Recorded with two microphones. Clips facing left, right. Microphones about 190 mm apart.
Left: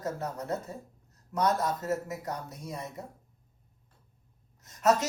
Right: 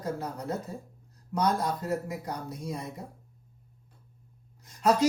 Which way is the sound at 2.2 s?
30° right (ahead or behind).